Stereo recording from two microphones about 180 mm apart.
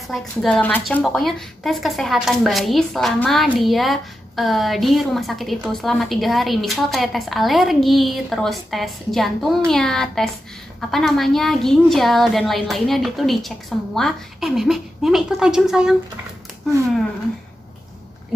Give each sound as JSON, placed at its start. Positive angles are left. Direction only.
{"t": 0.1, "sound": "a woman's voice", "side_deg": 0}